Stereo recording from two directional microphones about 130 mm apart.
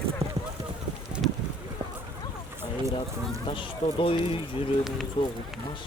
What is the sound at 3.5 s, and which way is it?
Speech, 40° left (ahead or behind).